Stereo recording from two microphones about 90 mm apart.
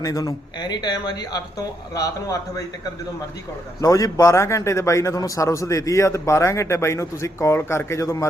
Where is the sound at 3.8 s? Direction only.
40° left (ahead or behind).